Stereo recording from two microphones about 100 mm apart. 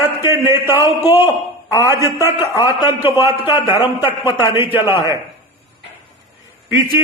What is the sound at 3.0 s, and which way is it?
Speech, 20° right (ahead or behind).